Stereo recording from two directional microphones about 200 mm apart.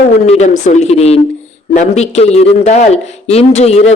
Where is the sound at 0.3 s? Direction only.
35° left (ahead or behind).